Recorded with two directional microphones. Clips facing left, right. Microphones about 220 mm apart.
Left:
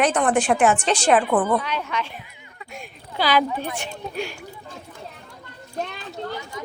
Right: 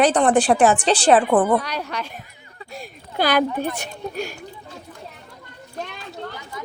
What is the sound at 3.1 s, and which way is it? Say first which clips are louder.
Speech: right 2 dB; 50° right (ahead or behind).